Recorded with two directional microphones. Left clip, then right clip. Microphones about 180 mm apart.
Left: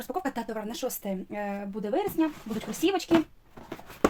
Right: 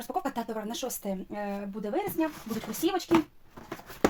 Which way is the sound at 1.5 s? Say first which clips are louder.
Left 4 dB; 40° left (ahead or behind).